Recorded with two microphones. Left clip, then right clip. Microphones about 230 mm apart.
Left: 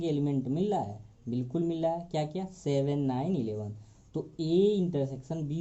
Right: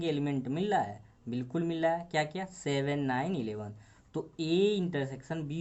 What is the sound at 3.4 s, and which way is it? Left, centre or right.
Speech, right.